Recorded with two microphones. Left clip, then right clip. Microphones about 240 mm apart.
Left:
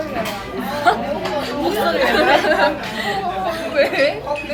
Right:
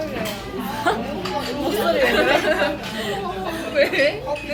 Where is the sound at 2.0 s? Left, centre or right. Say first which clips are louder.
Left 4 dB; centre.